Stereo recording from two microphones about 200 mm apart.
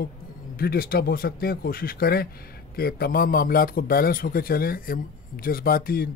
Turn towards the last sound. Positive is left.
turn(degrees=50)  # may be behind; listen again after turning